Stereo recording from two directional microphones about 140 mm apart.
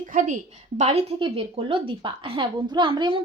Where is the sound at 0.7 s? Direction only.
50° right (ahead or behind).